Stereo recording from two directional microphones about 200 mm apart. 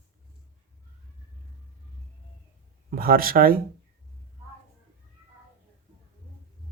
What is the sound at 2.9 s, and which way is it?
Speech, 45° right (ahead or behind).